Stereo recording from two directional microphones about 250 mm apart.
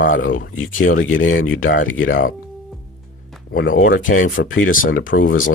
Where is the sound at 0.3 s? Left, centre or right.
Left.